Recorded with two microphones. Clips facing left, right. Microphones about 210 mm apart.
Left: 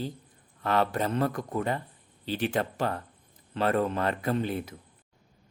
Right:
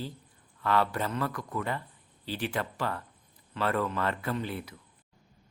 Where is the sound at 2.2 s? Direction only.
20° left (ahead or behind).